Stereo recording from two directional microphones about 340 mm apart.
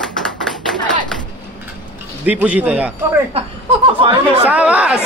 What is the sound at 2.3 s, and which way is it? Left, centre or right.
Speech, centre.